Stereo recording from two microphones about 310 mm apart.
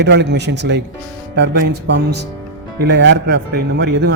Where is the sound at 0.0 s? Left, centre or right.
Right.